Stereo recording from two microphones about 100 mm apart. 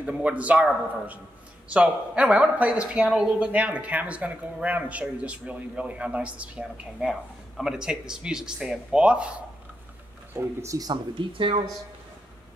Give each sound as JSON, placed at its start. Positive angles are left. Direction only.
{"t": 0.0, "sound": "speech", "side_deg": -15}
{"t": 1.7, "sound": "speech", "side_deg": -10}
{"t": 10.3, "sound": "speech", "side_deg": -30}
{"t": 11.1, "sound": "speech", "side_deg": -60}